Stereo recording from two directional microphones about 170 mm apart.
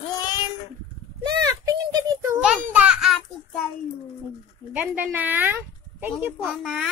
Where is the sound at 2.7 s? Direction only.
5° right (ahead or behind).